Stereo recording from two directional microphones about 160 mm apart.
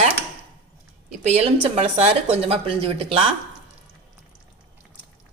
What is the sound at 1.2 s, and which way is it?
Speech, 40° right (ahead or behind).